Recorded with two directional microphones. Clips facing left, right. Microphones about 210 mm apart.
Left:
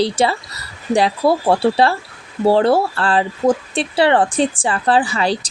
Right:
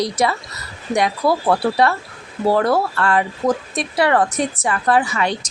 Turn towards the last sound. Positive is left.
turn(degrees=30)  # may be behind; listen again after turning